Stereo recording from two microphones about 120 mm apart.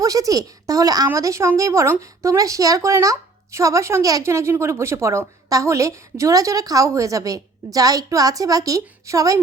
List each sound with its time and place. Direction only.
0.0 s speech: 30° right (ahead or behind)